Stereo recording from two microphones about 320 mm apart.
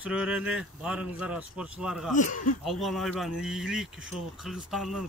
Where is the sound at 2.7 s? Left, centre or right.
Centre.